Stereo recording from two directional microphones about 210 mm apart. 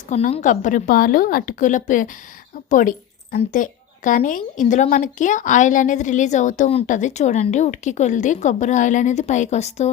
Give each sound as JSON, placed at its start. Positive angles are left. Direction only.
{"t": 0.1, "sound": "a woman's voice", "side_deg": 30}